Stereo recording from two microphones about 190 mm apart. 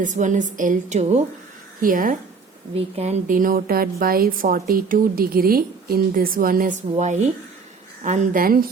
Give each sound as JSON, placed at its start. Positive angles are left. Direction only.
{"t": 0.0, "sound": "a woman's voice", "side_deg": -40}
{"t": 2.7, "sound": "speech", "side_deg": -35}
{"t": 6.9, "sound": "a woman's voice", "side_deg": -35}